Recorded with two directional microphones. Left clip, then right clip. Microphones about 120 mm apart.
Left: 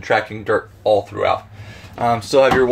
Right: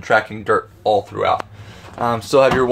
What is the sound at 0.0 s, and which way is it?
Speech, 40° right (ahead or behind).